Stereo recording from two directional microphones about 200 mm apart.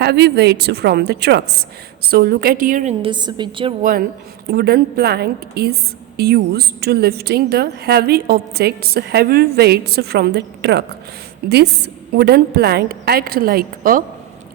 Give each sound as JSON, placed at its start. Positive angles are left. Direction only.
{"t": 0.0, "sound": "a woman's voice", "side_deg": -55}
{"t": 3.0, "sound": "a woman's voice", "side_deg": -25}
{"t": 4.4, "sound": "a woman's voice", "side_deg": -55}